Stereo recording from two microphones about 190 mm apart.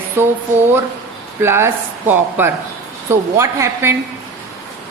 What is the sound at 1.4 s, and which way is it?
Speech, 10° right (ahead or behind).